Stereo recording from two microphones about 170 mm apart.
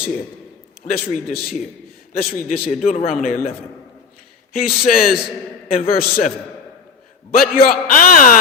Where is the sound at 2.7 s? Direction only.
45° left (ahead or behind).